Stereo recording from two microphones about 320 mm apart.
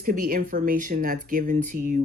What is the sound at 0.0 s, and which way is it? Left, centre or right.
Speech, right.